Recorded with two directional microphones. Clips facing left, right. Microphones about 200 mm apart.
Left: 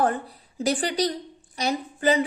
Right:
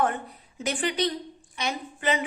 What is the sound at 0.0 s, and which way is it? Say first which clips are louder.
A woman's voice: left 3 dB; 35° left (ahead or behind).